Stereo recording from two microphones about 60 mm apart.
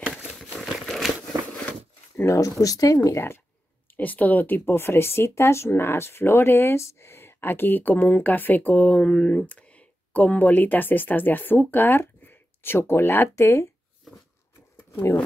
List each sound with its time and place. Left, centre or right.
0.0 s crumpling: centre
2.2 s speech: left
3.9 s speech: left
13.3 s speech: left
14.1 s a sound: centre